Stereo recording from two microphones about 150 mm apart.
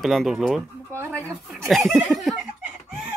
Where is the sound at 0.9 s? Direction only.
15° right (ahead or behind).